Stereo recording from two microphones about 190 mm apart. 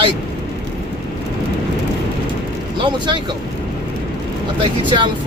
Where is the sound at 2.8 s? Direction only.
25° right (ahead or behind).